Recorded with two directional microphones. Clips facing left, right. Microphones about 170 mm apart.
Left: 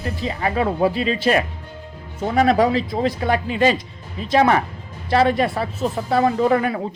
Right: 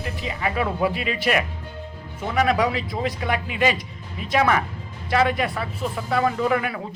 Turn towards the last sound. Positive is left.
turn(degrees=35)  # may be behind; listen again after turning